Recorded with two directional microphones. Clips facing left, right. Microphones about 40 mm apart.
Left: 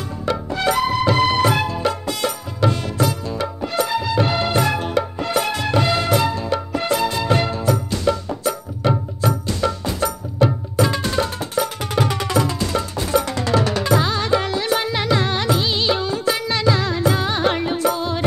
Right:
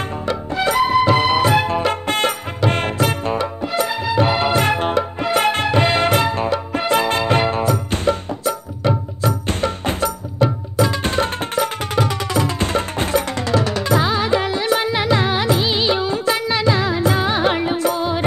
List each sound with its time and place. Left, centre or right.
0.6 s music: centre
1.7 s music: right
3.9 s music: centre
4.6 s music: right
9.5 s music: right
13.9 s music: centre